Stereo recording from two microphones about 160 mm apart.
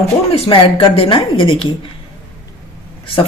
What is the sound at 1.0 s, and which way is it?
Speech, 35° left (ahead or behind).